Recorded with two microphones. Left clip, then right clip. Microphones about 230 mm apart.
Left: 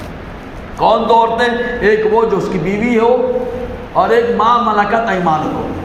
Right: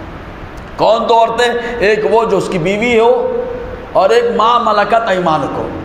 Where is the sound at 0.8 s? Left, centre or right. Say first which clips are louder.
Right 1 dB; right.